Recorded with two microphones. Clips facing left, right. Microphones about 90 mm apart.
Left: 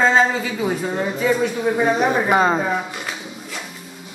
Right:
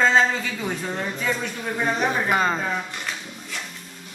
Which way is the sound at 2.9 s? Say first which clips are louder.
Left 3 dB; 5° left (ahead or behind).